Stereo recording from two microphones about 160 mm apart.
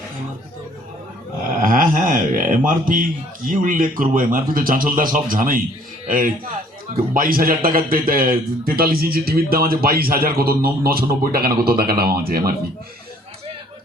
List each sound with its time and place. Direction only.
1.6 s a man's voice: 55° right (ahead or behind)